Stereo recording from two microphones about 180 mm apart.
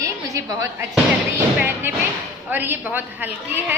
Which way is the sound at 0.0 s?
15° right (ahead or behind).